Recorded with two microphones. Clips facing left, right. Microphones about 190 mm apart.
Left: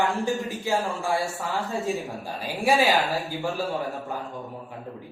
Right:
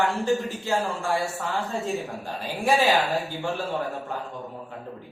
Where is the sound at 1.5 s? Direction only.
Centre (ahead or behind).